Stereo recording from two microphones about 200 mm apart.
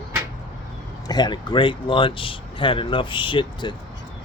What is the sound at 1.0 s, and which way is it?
Speech, 20° left (ahead or behind).